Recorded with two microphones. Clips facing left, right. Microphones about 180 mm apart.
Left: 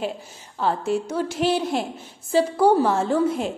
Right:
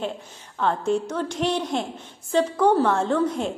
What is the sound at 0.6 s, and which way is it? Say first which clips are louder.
A woman's voice: even; 5° left (ahead or behind).